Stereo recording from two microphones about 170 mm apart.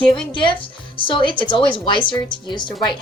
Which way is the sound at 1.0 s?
30° left (ahead or behind).